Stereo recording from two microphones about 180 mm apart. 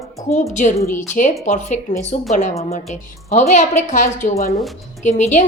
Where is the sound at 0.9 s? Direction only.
45° left (ahead or behind).